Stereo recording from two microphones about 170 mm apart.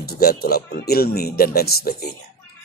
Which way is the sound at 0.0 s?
65° left (ahead or behind).